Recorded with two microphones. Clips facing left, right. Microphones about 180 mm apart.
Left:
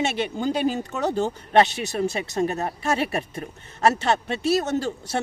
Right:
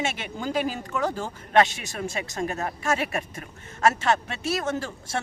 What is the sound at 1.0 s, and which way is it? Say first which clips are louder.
Speech: left 8 dB; 25° left (ahead or behind).